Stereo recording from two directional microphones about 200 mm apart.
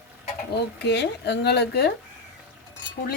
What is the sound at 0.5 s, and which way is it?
Speech, 55° left (ahead or behind).